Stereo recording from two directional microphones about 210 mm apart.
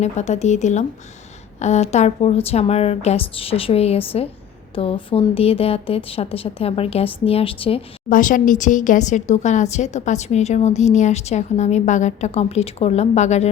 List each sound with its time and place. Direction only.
0.0 s a woman's voice: 35° left (ahead or behind)
8.1 s a woman's voice: 40° left (ahead or behind)